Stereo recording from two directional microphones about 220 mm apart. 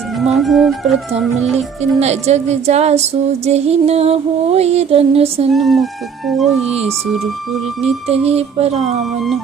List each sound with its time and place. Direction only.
0.3 s speech: centre (ahead or behind)
1.5 s music: 30° right (ahead or behind)
5.5 s speech: centre (ahead or behind)
6.6 s music: 30° right (ahead or behind)